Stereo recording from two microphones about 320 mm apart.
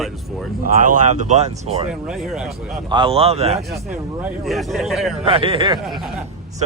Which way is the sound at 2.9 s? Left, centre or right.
Centre.